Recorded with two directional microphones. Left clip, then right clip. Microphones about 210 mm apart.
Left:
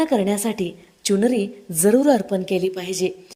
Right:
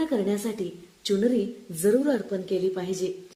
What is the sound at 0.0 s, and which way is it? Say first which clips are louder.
A woman's voice: left 6 dB; 35° left (ahead or behind).